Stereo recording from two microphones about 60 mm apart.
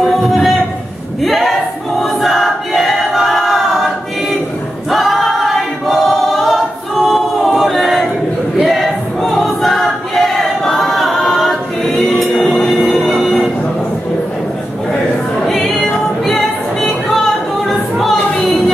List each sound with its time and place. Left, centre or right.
0.0 s a sound: centre
2.0 s choir: centre
4.9 s choir: centre
12.2 s music: centre
13.2 s a sound: centre
15.4 s music: centre
18.1 s music: centre